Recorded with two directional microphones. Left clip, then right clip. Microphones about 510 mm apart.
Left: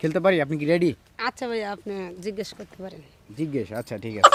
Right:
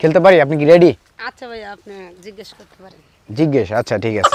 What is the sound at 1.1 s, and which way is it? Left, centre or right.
Speech, left.